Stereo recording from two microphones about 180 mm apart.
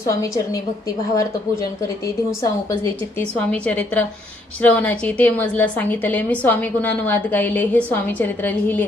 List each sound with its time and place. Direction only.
0.1 s a woman's voice: 15° left (ahead or behind)
3.2 s a woman's voice: 10° left (ahead or behind)